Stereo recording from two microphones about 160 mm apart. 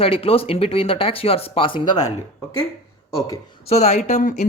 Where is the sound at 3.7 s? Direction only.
45° left (ahead or behind).